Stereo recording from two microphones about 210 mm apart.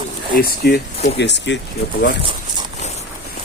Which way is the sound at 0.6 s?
50° left (ahead or behind).